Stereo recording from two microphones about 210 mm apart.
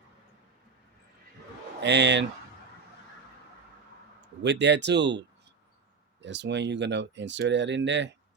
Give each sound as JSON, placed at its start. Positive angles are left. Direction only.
{"t": 1.8, "sound": "speech", "side_deg": -55}
{"t": 4.4, "sound": "speech", "side_deg": -55}
{"t": 6.2, "sound": "speech", "side_deg": -55}